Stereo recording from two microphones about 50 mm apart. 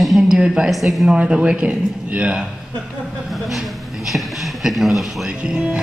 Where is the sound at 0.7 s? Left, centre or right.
Centre.